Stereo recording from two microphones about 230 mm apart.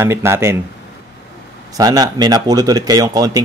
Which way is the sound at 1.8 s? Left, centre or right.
Centre.